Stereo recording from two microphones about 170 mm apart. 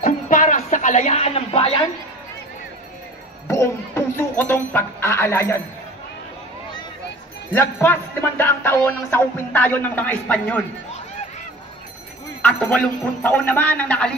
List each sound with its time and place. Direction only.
0.0 s a sound: 50° left (ahead or behind); by 1.9 s 30° left (ahead or behind)
3.4 s speech: 15° left (ahead or behind)
7.5 s music: 15° left (ahead or behind)
12.4 s music: 10° left (ahead or behind)